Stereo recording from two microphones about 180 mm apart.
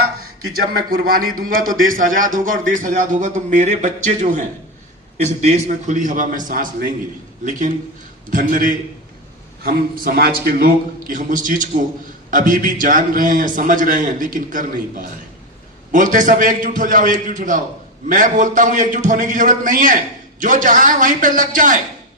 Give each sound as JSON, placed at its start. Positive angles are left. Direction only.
{"t": 0.5, "sound": "a man's voice", "side_deg": -55}
{"t": 8.3, "sound": "a man's voice", "side_deg": -50}
{"t": 15.9, "sound": "a man's voice", "side_deg": -45}